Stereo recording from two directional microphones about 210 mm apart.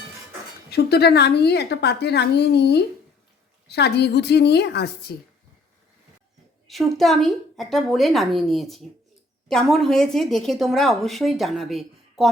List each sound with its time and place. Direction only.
0.7 s a woman's voice: 50° left (ahead or behind)
6.7 s a woman's voice: centre (ahead or behind)